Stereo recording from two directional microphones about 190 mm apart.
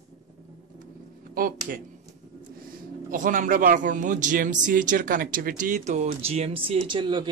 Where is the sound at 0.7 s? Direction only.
50° right (ahead or behind).